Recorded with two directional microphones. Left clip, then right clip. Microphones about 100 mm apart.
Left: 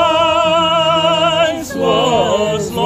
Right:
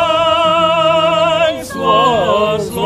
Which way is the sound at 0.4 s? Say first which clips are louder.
Right 1 dB; 30° right (ahead or behind).